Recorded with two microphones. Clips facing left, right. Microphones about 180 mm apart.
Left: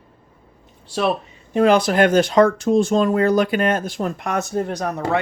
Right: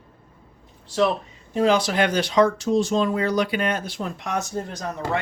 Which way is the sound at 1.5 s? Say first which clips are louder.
Left 4 dB; 60° left (ahead or behind).